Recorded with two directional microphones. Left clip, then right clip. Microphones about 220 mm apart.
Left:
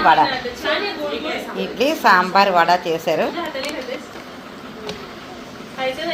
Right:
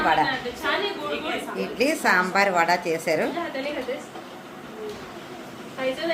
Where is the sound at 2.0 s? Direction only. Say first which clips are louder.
Left 8 dB; 5° right (ahead or behind).